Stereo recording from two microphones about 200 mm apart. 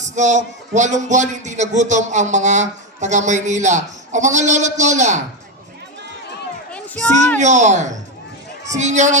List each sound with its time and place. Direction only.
0.0 s a man's voice: 35° right (ahead or behind)
6.7 s a sound: 5° left (ahead or behind)
7.3 s a man's voice: 35° right (ahead or behind)